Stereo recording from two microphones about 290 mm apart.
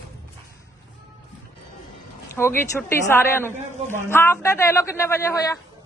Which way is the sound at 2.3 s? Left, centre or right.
Centre.